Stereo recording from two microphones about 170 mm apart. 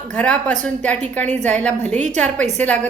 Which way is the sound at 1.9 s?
45° right (ahead or behind).